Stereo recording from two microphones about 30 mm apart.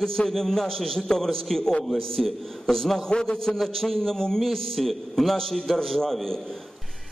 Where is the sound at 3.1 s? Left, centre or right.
Left.